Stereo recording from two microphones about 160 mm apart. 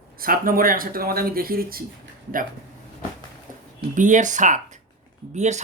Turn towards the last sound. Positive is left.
turn(degrees=-45)  # may be behind; listen again after turning